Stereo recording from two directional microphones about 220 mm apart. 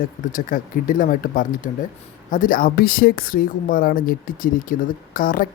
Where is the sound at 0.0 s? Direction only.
35° left (ahead or behind).